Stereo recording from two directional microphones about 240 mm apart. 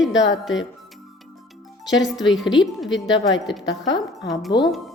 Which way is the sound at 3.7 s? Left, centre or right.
Centre.